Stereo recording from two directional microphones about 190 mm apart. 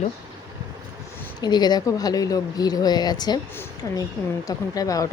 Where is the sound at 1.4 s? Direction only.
20° left (ahead or behind).